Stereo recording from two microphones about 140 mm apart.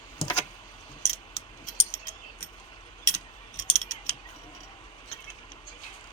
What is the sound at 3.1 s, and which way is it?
Mechanisms, 60° left (ahead or behind).